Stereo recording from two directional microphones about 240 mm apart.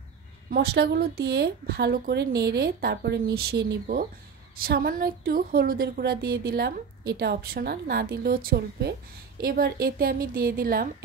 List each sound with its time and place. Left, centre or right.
0.5 s a woman's voice: right